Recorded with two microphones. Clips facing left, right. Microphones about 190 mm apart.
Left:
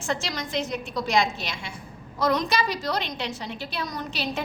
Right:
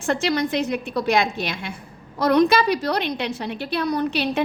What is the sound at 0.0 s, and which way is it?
A woman's voice, 60° right (ahead or behind).